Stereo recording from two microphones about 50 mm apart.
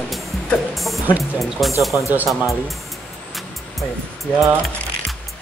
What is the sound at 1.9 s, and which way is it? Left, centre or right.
Speech, right.